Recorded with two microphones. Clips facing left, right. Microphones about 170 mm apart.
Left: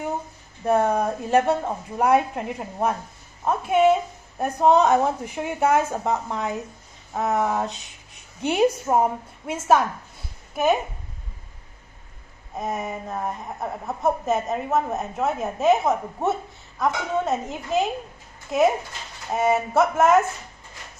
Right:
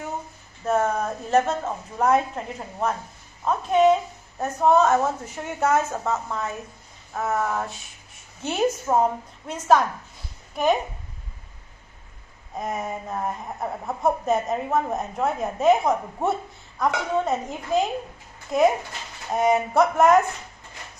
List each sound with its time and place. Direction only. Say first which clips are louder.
0.7 s a woman's voice: left 3 dB; 15° left (ahead or behind)
7.2 s a sound: left 2 dB; 20° left (ahead or behind)
8.4 s a woman's voice: left 3 dB; 10° left (ahead or behind)
12.5 s a woman's voice: left 1 dB; centre (ahead or behind)
19.3 s a woman's voice: right 1 dB; 5° left (ahead or behind)